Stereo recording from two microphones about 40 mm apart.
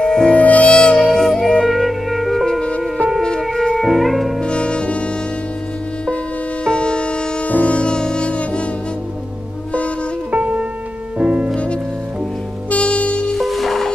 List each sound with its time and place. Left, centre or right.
0.0 s music: centre
0.3 s music: left
0.7 s music: left
1.1 s music: centre
3.2 s music: centre
3.7 s music: centre
4.4 s music: left
6.6 s music: left
10.3 s music: right
12.6 s music: left
13.3 s music: centre